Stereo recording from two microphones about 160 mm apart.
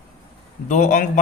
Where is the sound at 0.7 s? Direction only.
50° left (ahead or behind).